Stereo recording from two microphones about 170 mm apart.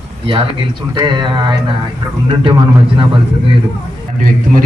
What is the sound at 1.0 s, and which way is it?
Speech, 25° right (ahead or behind).